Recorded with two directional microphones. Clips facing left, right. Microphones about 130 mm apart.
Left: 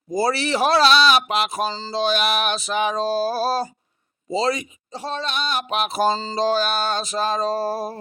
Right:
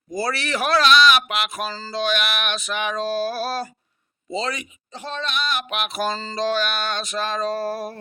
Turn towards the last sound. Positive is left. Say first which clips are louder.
# left 2 dB
turn(degrees=30)  # may be behind; listen again after turning